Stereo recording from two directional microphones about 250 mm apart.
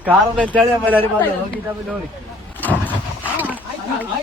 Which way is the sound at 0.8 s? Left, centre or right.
Centre.